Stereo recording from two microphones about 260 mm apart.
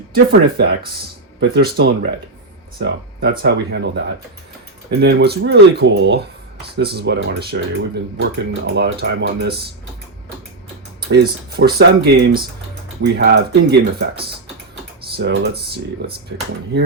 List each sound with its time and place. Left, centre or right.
0.1 s speech: right
11.0 s speech: right
15.1 s speech: right